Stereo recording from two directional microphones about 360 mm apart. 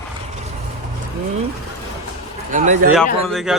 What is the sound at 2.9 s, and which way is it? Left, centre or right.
Speech, centre.